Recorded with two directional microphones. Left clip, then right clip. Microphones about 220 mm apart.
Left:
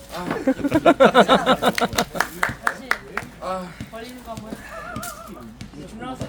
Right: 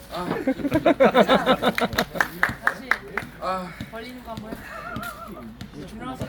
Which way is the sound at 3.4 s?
5° left (ahead or behind).